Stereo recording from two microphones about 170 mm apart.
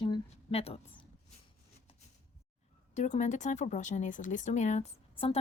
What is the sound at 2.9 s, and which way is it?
A woman's voice, 45° left (ahead or behind).